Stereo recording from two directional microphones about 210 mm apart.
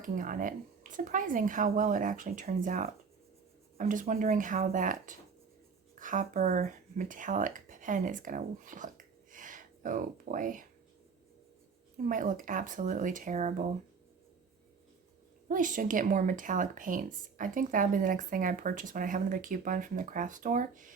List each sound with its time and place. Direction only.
0.0 s speech: 40° right (ahead or behind)
11.9 s speech: 40° right (ahead or behind)
15.4 s speech: 40° right (ahead or behind)